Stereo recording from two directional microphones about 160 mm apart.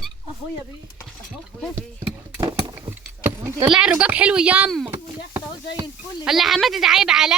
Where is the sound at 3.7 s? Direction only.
5° right (ahead or behind).